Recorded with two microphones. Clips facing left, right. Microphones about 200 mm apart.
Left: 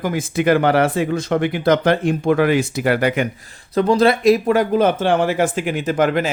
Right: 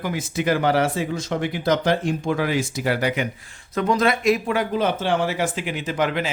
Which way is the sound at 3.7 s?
30° left (ahead or behind).